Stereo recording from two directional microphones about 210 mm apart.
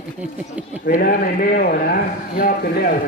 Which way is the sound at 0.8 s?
40° left (ahead or behind).